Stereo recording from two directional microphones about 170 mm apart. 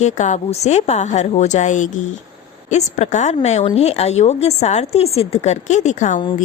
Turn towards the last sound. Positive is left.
turn(degrees=45)  # may be behind; listen again after turning